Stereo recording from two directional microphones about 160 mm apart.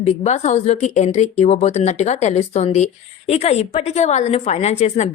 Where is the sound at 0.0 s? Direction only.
45° left (ahead or behind).